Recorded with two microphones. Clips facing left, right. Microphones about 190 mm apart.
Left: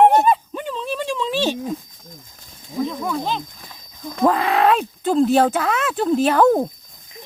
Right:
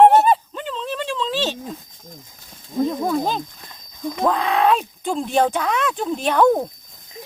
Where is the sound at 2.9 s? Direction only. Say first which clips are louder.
Right 3 dB; 40° right (ahead or behind).